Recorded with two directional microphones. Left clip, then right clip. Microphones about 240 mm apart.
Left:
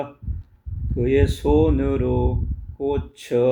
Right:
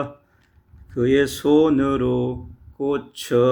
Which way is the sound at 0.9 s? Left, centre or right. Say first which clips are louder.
Right 2 dB; right.